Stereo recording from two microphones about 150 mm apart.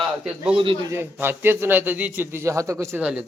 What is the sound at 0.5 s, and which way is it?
Speech, 35° right (ahead or behind).